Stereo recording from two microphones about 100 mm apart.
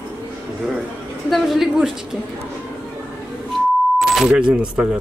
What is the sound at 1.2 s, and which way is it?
Speech, centre (ahead or behind).